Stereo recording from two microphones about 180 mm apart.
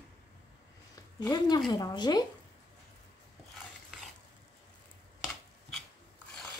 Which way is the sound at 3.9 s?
5° right (ahead or behind).